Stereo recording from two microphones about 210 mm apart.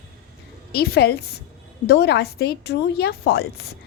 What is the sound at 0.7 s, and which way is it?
A woman's voice, 50° left (ahead or behind).